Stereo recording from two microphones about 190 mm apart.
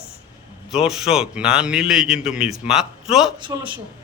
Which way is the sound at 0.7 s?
Centre (ahead or behind).